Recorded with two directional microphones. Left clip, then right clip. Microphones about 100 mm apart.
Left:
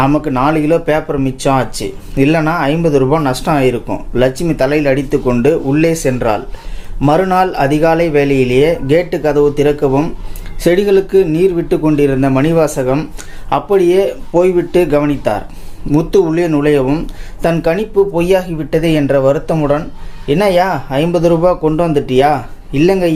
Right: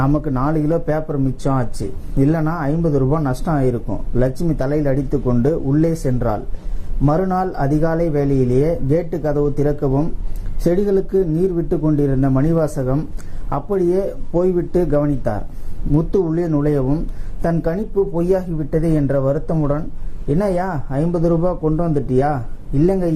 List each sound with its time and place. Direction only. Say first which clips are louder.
0.3 s speech: left 7 dB; 25° left (ahead or behind)
15.9 s speech: left 7 dB; 35° left (ahead or behind)